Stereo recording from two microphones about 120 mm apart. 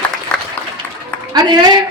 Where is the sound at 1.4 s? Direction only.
35° right (ahead or behind).